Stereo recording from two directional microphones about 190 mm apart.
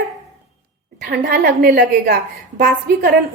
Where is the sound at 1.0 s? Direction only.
45° right (ahead or behind).